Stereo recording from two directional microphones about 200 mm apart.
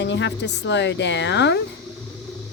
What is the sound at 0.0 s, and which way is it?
A woman's voice, 60° left (ahead or behind).